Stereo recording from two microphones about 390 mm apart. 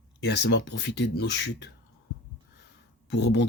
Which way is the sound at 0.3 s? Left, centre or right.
Left.